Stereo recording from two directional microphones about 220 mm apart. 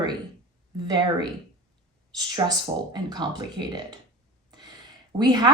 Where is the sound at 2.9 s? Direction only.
20° right (ahead or behind).